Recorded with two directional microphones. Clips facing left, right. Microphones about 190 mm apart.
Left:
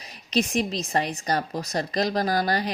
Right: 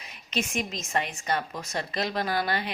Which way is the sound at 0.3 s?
35° left (ahead or behind).